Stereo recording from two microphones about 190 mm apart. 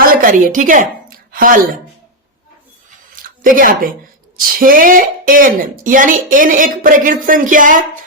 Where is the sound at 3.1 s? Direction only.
45° right (ahead or behind).